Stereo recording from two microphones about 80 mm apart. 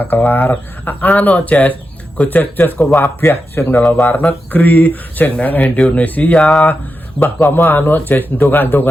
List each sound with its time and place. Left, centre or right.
0.0 s speech: left
7.2 s speech: left